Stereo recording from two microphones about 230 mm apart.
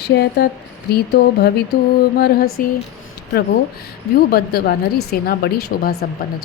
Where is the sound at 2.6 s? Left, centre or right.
Left.